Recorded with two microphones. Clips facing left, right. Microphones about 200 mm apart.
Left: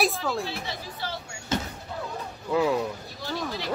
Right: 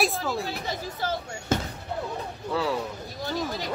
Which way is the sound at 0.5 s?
45° right (ahead or behind).